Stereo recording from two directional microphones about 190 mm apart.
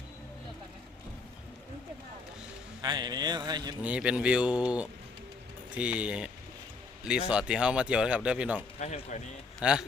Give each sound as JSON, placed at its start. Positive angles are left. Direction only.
{"t": 2.8, "sound": "speech", "side_deg": -20}
{"t": 3.8, "sound": "speech", "side_deg": -5}
{"t": 8.8, "sound": "speech", "side_deg": 40}
{"t": 9.6, "sound": "speech", "side_deg": -5}